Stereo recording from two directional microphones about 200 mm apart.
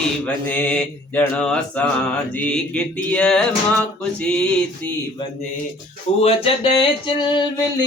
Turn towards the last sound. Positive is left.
turn(degrees=25)  # may be behind; listen again after turning